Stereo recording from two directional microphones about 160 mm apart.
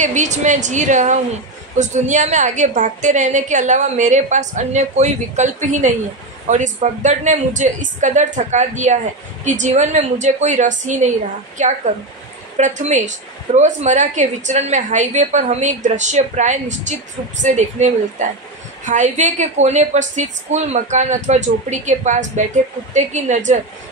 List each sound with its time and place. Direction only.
0.0 s a woman's voice: 50° right (ahead or behind)